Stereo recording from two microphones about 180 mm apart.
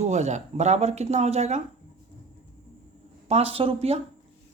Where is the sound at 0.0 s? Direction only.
40° right (ahead or behind).